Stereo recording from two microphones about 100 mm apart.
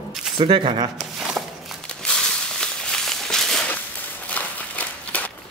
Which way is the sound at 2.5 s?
5° left (ahead or behind).